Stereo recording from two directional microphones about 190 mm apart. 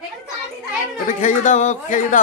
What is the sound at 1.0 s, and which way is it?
A man's voice, 40° left (ahead or behind).